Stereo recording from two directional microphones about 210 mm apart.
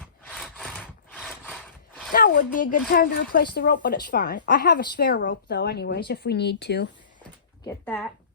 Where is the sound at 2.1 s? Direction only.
40° left (ahead or behind).